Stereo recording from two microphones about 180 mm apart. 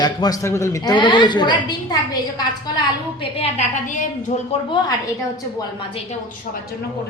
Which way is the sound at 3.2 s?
35° left (ahead or behind).